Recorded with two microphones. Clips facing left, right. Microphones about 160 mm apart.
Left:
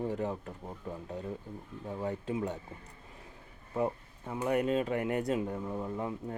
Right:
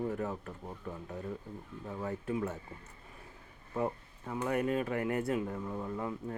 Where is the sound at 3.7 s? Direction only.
20° left (ahead or behind).